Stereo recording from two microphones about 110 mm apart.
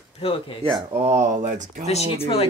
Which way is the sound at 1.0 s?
90° right.